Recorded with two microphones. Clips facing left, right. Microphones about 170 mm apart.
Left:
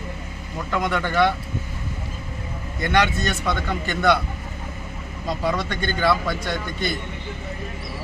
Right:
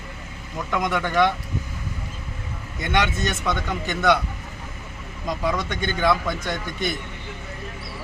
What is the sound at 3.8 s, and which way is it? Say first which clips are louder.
Speech: even; 15° right (ahead or behind).